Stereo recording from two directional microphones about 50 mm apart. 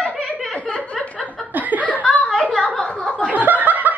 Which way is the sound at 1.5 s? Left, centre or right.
Right.